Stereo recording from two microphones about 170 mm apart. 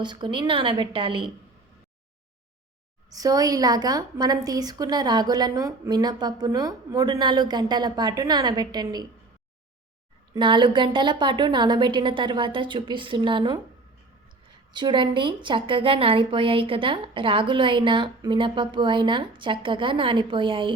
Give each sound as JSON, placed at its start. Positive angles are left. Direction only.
{"t": 0.0, "sound": "a woman's voice", "side_deg": -25}
{"t": 3.1, "sound": "a woman's voice", "side_deg": -20}
{"t": 10.3, "sound": "a woman's voice", "side_deg": -30}
{"t": 14.7, "sound": "a woman's voice", "side_deg": -25}